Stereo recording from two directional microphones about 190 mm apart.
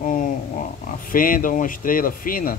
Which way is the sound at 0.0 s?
45° left (ahead or behind).